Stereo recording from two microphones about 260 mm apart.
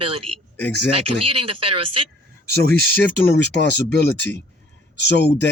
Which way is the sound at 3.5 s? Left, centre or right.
Left.